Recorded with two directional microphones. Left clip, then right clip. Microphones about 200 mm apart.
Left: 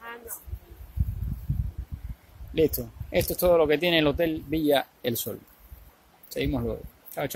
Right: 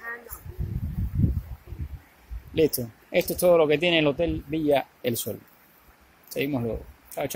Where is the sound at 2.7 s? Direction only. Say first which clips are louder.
Right 2 dB; centre (ahead or behind).